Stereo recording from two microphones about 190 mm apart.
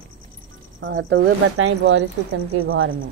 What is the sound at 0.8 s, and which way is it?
Speech, 90° right.